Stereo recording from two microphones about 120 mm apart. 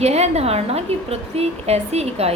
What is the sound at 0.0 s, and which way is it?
A woman's voice, 65° right (ahead or behind).